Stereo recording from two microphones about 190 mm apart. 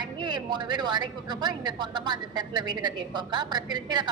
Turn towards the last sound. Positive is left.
turn(degrees=-20)  # may be behind; listen again after turning